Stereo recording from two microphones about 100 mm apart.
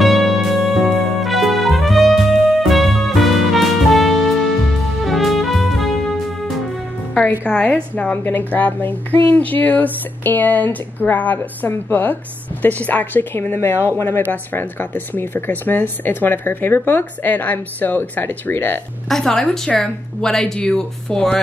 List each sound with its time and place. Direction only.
0.0 s music: centre (ahead or behind)
7.2 s a woman's voice: 15° left (ahead or behind)
19.0 s a woman's voice: 5° left (ahead or behind)